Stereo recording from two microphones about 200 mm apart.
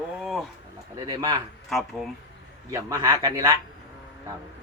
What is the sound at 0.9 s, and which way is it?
Speech, 20° right (ahead or behind).